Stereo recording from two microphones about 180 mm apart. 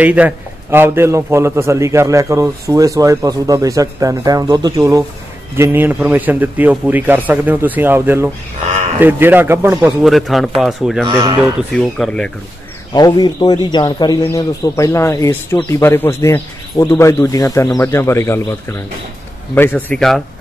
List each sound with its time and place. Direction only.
0.0 s a man's voice: 10° right (ahead or behind)
11.1 s speech: 30° right (ahead or behind)
11.8 s a man's voice: 5° left (ahead or behind)
12.9 s speech: 25° left (ahead or behind); by 20.2 s 5° left (ahead or behind)